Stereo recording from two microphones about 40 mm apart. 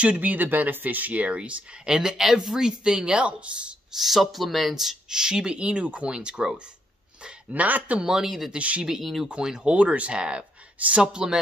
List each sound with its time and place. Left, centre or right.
0.0 s speech: right
1.9 s speech: centre
3.9 s speech: centre
5.1 s speech: centre
6.1 s speech: centre
7.5 s speech: right
8.0 s speech: centre
8.5 s speech: right
11.0 s speech: centre